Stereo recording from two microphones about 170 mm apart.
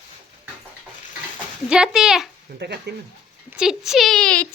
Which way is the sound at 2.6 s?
75° right (ahead or behind).